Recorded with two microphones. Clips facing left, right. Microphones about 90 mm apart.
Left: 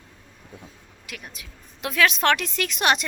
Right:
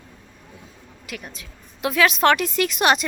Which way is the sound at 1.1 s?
Centre (ahead or behind).